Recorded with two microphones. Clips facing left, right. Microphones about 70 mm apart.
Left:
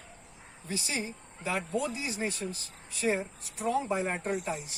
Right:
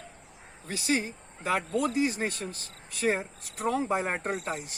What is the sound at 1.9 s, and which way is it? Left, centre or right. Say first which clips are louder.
Speech: right 6 dB; right.